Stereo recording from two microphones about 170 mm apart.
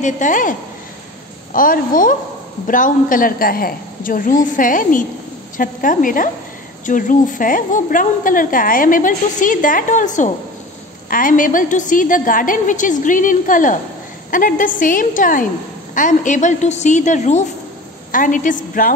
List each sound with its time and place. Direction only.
0.0 s a woman's voice: 50° left (ahead or behind)